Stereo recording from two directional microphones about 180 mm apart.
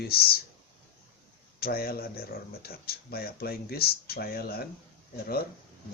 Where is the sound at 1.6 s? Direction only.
55° left (ahead or behind).